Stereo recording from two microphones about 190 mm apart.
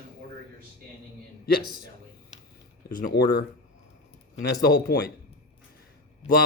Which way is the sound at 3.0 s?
55° left (ahead or behind).